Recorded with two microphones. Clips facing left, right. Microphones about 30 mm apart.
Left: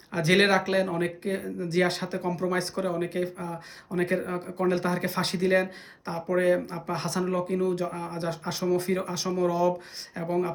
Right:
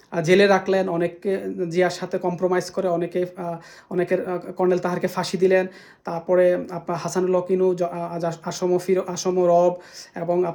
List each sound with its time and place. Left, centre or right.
0.1 s speech: left